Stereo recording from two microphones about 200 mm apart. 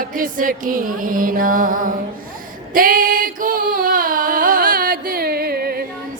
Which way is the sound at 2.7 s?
45° right (ahead or behind).